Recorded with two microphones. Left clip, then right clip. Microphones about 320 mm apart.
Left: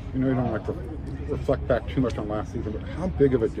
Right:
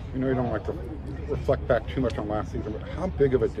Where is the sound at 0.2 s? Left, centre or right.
Right.